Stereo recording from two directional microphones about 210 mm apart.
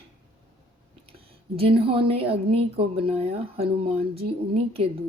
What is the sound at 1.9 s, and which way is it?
Speech, 25° right (ahead or behind).